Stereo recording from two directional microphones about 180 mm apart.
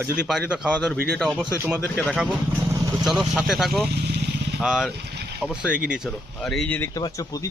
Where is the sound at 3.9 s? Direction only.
65° right (ahead or behind).